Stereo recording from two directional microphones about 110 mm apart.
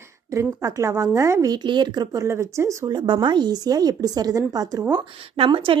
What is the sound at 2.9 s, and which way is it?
A woman's voice, 45° right (ahead or behind).